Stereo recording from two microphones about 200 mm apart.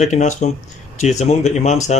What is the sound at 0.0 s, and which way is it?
Speech, 35° left (ahead or behind).